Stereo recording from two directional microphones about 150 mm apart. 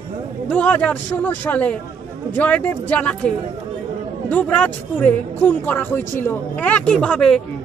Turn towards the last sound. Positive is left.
turn(degrees=5)  # may be behind; listen again after turning